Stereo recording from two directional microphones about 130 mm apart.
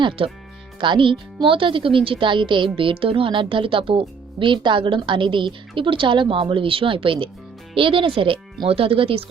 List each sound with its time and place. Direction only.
0.2 s speech: 45° right (ahead or behind)